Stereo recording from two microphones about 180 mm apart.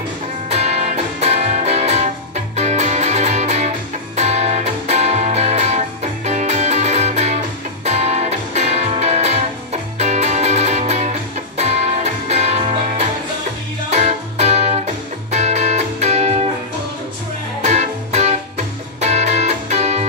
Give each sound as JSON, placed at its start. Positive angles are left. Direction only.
{"t": 0.5, "sound": "music", "side_deg": -35}
{"t": 17.6, "sound": "music", "side_deg": -40}